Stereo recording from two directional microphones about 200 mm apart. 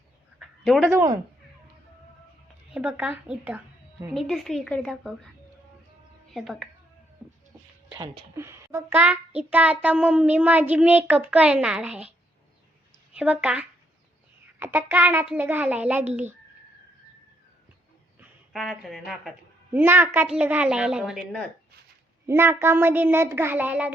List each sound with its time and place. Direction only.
0.3 s a sound: centre (ahead or behind)
0.9 s a child's voice: 15° right (ahead or behind)
2.7 s a woman's voice: 5° right (ahead or behind)
6.3 s a woman's voice: centre (ahead or behind)
7.9 s a child's voice: 15° right (ahead or behind)
13.1 s a child's voice: 5° right (ahead or behind)
18.2 s speech: centre (ahead or behind)
19.7 s a woman's voice: 10° right (ahead or behind)